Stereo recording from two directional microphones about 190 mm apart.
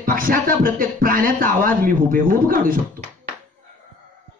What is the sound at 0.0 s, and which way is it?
A man's voice, 50° right (ahead or behind).